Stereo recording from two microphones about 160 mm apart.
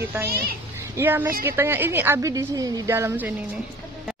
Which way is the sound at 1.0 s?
15° right (ahead or behind).